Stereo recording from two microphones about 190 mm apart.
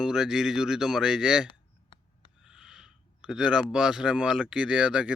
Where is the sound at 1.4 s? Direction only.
25° left (ahead or behind).